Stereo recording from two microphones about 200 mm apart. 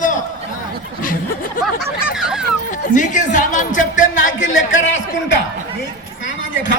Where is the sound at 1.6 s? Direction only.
5° right (ahead or behind).